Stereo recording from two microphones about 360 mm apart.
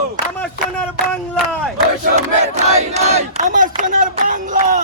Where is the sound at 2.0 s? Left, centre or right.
Centre.